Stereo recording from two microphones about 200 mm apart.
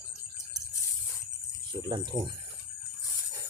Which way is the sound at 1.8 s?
20° right (ahead or behind).